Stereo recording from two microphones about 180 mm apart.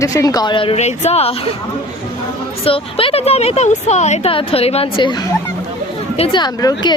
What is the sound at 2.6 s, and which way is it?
A woman's voice, 30° left (ahead or behind).